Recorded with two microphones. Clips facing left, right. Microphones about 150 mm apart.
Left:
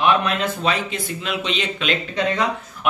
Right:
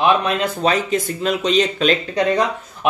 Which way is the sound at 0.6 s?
40° right (ahead or behind).